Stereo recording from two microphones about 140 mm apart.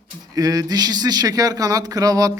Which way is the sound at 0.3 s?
25° right (ahead or behind).